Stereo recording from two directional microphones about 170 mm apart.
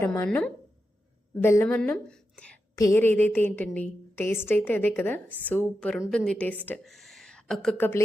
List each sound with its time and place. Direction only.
0.0 s a woman's voice: 15° left (ahead or behind)
0.3 s a woman's voice: 5° left (ahead or behind)
1.4 s a woman's voice: 15° left (ahead or behind)
2.7 s a woman's voice: 15° left (ahead or behind)